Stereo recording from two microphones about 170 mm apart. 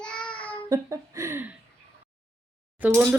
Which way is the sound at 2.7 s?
10° right (ahead or behind).